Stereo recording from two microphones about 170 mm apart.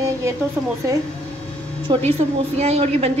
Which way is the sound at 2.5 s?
40° right (ahead or behind).